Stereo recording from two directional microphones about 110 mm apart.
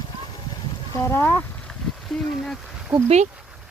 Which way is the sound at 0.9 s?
25° left (ahead or behind).